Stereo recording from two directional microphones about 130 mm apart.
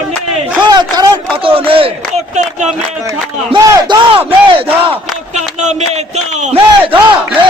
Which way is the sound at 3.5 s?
40° right (ahead or behind).